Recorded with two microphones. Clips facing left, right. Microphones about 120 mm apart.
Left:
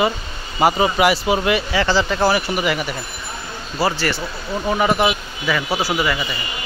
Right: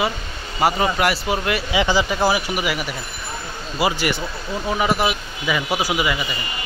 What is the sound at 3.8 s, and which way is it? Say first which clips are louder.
Speech: left 1 dB; 15° right (ahead or behind).